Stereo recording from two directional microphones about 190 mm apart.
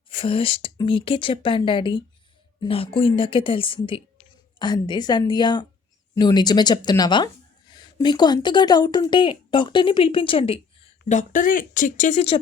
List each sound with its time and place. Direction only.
0.1 s speech: 30° left (ahead or behind)
11.2 s speech: 45° left (ahead or behind)